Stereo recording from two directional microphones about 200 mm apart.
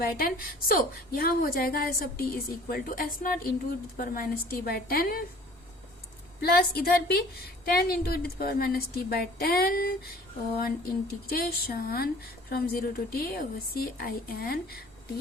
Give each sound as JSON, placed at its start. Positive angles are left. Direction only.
{"t": 0.0, "sound": "speech", "side_deg": 45}
{"t": 6.4, "sound": "speech", "side_deg": 50}